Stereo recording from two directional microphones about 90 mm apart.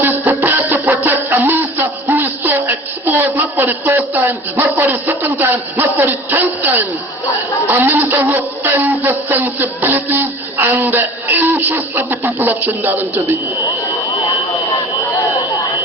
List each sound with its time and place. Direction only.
0.0 s music: 20° right (ahead or behind)
3.3 s speech: 20° right (ahead or behind)